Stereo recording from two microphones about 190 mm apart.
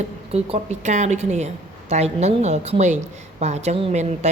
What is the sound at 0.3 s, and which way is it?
Speech, 35° right (ahead or behind).